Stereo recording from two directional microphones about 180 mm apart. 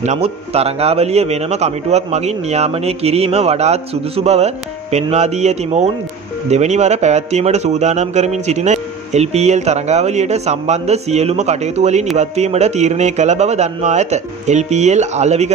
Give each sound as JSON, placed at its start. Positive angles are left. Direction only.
{"t": 0.0, "sound": "speech", "side_deg": -35}